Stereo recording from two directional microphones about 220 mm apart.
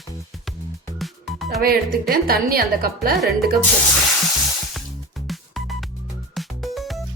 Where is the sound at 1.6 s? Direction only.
40° right (ahead or behind).